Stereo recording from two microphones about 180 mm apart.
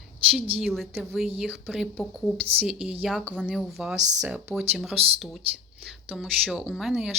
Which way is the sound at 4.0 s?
40° right (ahead or behind).